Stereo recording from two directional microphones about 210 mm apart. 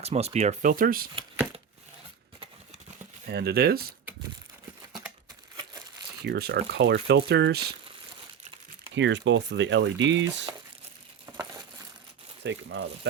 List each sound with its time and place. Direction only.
0.0 s speech: 30° right (ahead or behind)
3.2 s speech: 50° right (ahead or behind)
6.2 s speech: 50° right (ahead or behind)
9.0 s speech: 60° right (ahead or behind)
11.3 s crumpling: 15° right (ahead or behind)
12.4 s speech: 55° right (ahead or behind)